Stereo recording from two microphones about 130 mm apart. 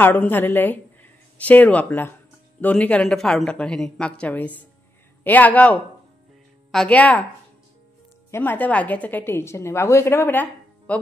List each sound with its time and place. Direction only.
0.0 s a woman's voice: 15° left (ahead or behind)
8.3 s a woman's voice: 15° left (ahead or behind)